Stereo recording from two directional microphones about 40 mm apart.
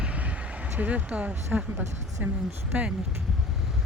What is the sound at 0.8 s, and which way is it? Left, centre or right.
Speech, right.